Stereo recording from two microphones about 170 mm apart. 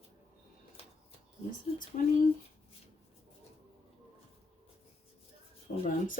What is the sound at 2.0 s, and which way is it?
Speech, 50° left (ahead or behind).